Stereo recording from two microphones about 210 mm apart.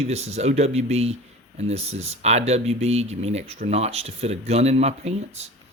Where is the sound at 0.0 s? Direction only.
30° right (ahead or behind).